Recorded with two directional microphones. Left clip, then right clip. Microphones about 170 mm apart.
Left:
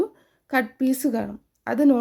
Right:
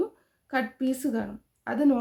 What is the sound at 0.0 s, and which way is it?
A woman's voice, 45° left (ahead or behind).